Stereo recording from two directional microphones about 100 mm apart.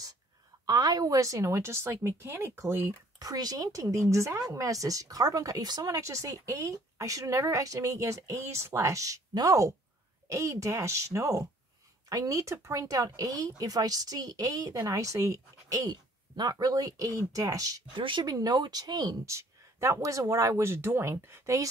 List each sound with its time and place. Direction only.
0.7 s a woman's voice: 40° right (ahead or behind)
3.2 s speech: 40° right (ahead or behind)
17.9 s speech: 55° right (ahead or behind); by 21.6 s 30° right (ahead or behind)